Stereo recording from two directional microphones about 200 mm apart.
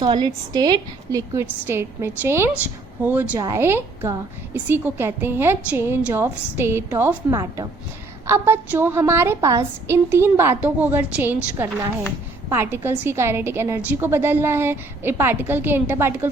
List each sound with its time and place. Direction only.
0.0 s a woman's voice: 20° right (ahead or behind)